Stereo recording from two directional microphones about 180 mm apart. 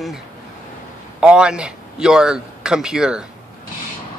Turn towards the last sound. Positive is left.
turn(degrees=-5)  # may be behind; listen again after turning